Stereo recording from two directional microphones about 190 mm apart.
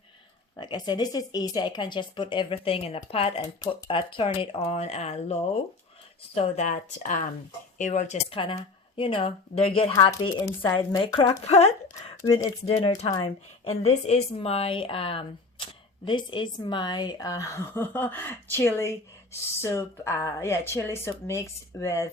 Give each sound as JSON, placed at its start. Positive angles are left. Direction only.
{"t": 0.5, "sound": "speech", "side_deg": 20}
{"t": 9.9, "sound": "a woman's voice", "side_deg": 20}
{"t": 10.8, "sound": "speech", "side_deg": 25}
{"t": 11.9, "sound": "a woman's voice", "side_deg": 20}